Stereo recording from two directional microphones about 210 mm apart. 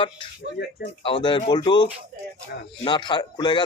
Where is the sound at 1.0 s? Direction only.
20° left (ahead or behind).